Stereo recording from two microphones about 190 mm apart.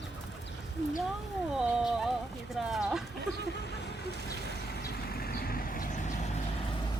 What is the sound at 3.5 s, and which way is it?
Vehicle, 60° left (ahead or behind).